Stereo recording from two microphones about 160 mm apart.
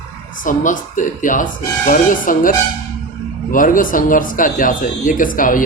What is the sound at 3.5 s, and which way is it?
A man's voice, 60° left (ahead or behind).